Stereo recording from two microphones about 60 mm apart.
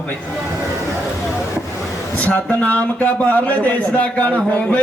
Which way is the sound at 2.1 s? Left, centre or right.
Left.